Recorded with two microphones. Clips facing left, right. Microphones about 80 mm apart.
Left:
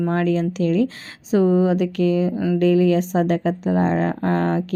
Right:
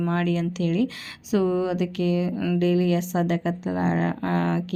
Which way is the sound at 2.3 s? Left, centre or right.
Left.